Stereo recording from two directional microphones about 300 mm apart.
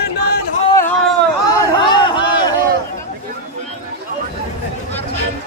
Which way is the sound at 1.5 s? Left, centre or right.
Centre.